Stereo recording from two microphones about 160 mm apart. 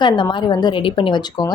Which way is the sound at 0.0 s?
30° left (ahead or behind).